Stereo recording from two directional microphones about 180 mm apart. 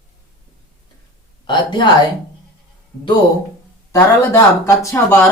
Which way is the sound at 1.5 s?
25° left (ahead or behind).